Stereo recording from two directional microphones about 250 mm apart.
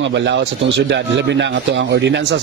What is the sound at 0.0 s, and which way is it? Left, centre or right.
Speech, right.